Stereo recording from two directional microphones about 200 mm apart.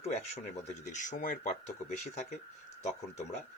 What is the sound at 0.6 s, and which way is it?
Speech, 35° left (ahead or behind).